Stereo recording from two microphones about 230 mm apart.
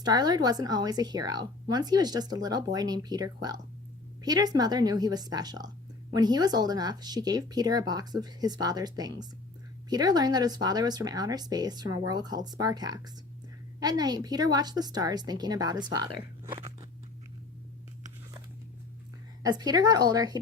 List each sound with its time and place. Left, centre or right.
0.0 s a woman's voice: centre
19.4 s a woman's voice: centre